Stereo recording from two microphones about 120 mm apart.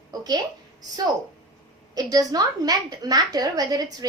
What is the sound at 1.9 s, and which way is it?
A woman's voice, 30° right (ahead or behind).